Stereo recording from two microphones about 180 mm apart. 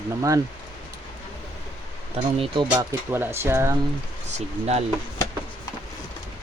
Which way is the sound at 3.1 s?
15° right (ahead or behind).